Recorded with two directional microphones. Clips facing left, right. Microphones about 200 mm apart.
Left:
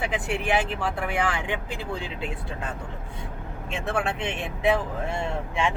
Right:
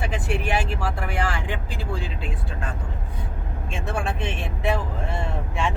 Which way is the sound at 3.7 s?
20° left (ahead or behind).